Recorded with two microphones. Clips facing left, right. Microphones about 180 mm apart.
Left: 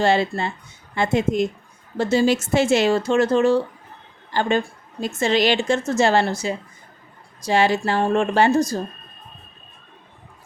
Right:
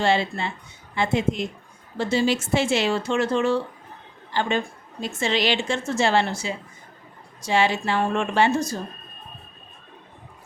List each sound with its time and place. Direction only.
0.0 s a woman's voice: 45° left (ahead or behind)